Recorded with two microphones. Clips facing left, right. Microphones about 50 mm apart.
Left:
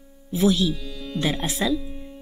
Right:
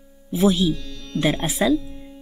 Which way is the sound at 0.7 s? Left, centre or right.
Centre.